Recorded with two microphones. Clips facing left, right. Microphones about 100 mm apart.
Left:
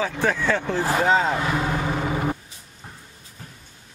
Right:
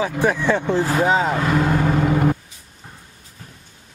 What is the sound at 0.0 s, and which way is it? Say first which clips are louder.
Speech: right 4 dB; 15° right (ahead or behind).